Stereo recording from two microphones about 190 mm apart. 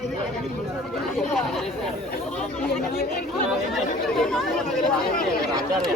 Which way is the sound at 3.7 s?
Centre (ahead or behind).